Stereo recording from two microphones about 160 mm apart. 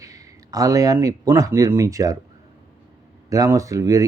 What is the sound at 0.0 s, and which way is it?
Speech, 20° right (ahead or behind).